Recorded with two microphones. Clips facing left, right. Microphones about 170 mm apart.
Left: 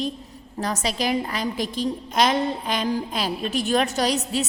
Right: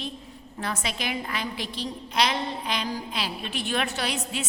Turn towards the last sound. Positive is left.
turn(degrees=40)  # may be behind; listen again after turning